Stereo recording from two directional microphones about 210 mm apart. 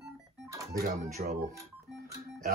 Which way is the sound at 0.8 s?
45° right (ahead or behind).